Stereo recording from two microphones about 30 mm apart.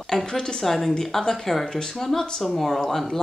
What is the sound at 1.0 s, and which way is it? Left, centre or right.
Speech, centre.